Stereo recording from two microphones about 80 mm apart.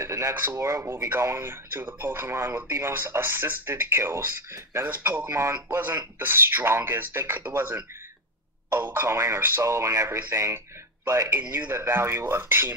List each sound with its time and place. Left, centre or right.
0.0 s speech: right
0.9 s speech: right
4.8 s speech: centre
5.3 s speech: right
5.8 s speech: right
9.4 s speech: right
9.7 s speech: right
11.7 s speech: right